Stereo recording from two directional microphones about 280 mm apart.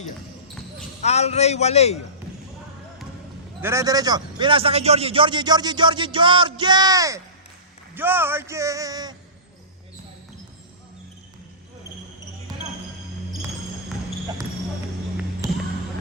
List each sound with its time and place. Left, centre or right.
1.0 s a man's voice: left
3.6 s a man's voice: centre